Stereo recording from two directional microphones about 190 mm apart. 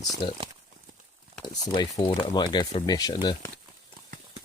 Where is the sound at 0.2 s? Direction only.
25° left (ahead or behind).